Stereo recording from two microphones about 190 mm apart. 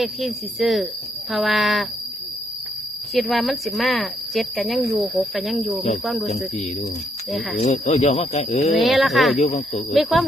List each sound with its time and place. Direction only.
0.0 s speech: centre (ahead or behind)
3.2 s speech: centre (ahead or behind)
6.2 s speech: 35° left (ahead or behind)
8.7 s speech: centre (ahead or behind)
9.4 s speech: 35° left (ahead or behind)
9.9 s speech: centre (ahead or behind)